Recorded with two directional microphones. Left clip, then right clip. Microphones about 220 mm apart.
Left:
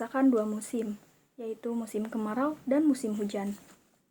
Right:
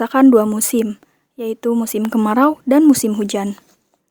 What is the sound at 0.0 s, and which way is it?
A woman's voice, 50° right (ahead or behind).